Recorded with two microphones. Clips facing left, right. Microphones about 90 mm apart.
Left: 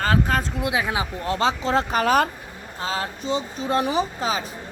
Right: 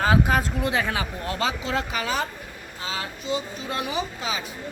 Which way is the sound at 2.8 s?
40° left (ahead or behind).